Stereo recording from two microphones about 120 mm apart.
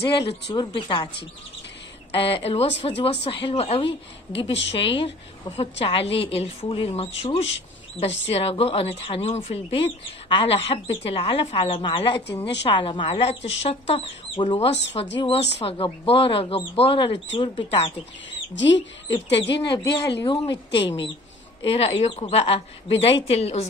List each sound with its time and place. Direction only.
0.5 s a woman's voice: 40° left (ahead or behind)
2.1 s a woman's voice: 50° left (ahead or behind)
14.7 s a woman's voice: 60° left (ahead or behind)
15.1 s speech: 50° left (ahead or behind)
19.1 s a woman's voice: 50° left (ahead or behind)